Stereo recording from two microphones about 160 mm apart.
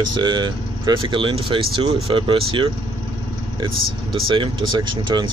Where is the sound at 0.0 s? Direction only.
25° right (ahead or behind).